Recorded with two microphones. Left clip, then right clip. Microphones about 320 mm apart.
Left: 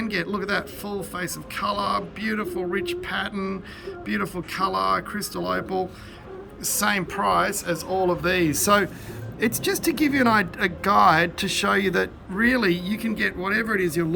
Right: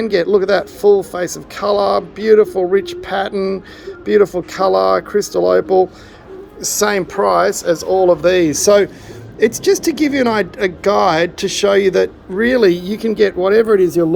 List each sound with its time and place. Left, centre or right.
0.0 s speech: centre
14.0 s speech: right